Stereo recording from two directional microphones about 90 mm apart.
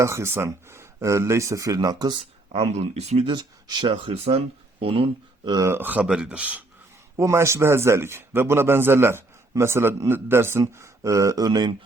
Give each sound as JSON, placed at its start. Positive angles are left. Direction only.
{"t": 0.0, "sound": "speech", "side_deg": -30}
{"t": 3.2, "sound": "speech", "side_deg": -60}
{"t": 5.6, "sound": "speech", "side_deg": -25}
{"t": 7.2, "sound": "a man's voice", "side_deg": -30}
{"t": 10.6, "sound": "speech", "side_deg": -40}